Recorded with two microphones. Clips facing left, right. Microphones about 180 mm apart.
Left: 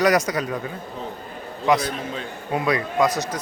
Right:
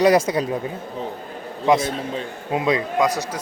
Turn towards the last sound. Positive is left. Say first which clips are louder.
# even
turn(degrees=-10)  # may be behind; listen again after turning